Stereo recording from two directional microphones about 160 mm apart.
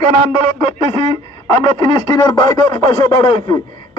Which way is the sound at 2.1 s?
20° left (ahead or behind).